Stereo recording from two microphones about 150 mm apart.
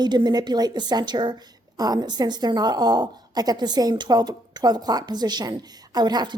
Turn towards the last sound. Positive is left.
turn(degrees=-30)  # may be behind; listen again after turning